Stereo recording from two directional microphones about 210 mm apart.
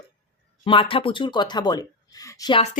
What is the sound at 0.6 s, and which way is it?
Speech, 25° left (ahead or behind).